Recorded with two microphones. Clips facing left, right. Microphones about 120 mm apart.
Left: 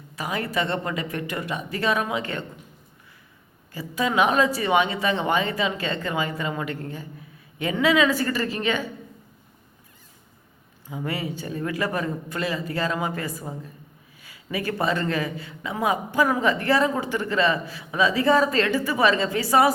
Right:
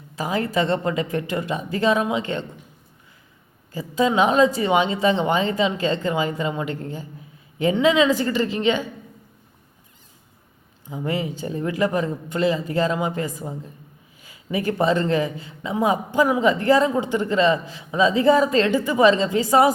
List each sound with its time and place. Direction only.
0.2 s speech: 30° right (ahead or behind)
3.7 s speech: 25° right (ahead or behind)
10.8 s speech: 25° right (ahead or behind)